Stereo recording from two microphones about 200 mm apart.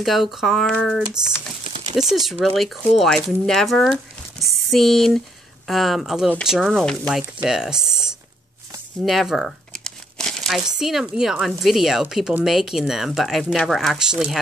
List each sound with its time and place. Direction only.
0.0 s speech: centre (ahead or behind)
9.0 s crumpling: centre (ahead or behind)
10.8 s speech: centre (ahead or behind)